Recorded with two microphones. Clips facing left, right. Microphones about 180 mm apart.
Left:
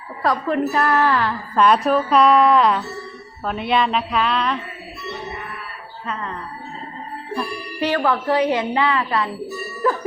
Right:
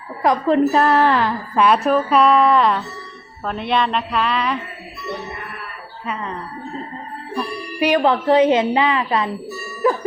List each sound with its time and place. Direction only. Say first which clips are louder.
0.2 s speech: right 4 dB; 25° right (ahead or behind)
1.5 s speech: even; 5° right (ahead or behind)
7.8 s speech: right 4 dB; 15° right (ahead or behind)
9.8 s music: right 3 dB; 15° right (ahead or behind)